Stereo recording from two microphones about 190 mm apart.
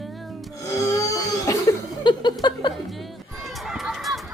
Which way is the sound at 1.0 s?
15° left (ahead or behind).